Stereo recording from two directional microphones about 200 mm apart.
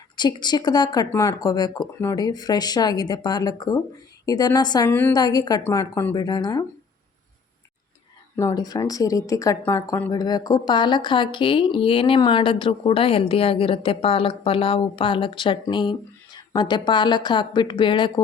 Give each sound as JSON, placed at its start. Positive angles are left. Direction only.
{"t": 0.2, "sound": "speech", "side_deg": 20}
{"t": 8.4, "sound": "speech", "side_deg": 20}